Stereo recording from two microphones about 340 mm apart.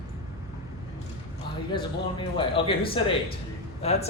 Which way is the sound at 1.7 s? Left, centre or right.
Centre.